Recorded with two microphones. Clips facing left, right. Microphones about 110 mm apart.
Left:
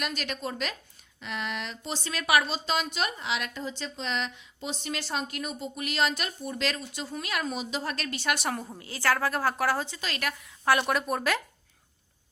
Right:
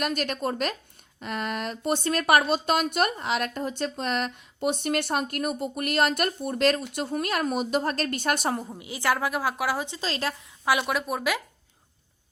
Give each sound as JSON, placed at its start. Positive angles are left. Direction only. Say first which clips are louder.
{"t": 0.0, "sound": "speech", "louder": "right 6 dB", "side_deg": -45}
{"t": 8.8, "sound": "a woman's voice", "louder": "even", "side_deg": -15}
{"t": 9.8, "sound": "a woman's voice", "louder": "right 4 dB", "side_deg": -25}
{"t": 10.7, "sound": "a woman's voice", "louder": "even", "side_deg": -5}